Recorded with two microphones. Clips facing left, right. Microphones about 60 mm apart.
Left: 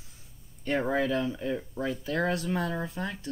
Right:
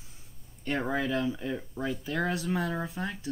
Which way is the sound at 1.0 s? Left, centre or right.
Centre.